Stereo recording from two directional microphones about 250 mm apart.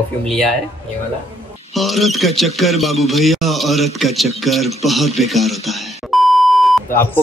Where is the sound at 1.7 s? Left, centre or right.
Centre.